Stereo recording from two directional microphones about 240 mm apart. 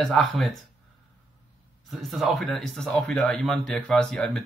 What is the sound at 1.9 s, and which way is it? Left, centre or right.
Speech, centre.